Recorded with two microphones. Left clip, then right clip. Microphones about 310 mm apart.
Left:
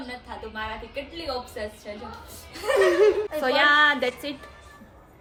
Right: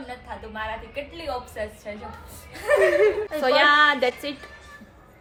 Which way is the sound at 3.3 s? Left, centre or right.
Centre.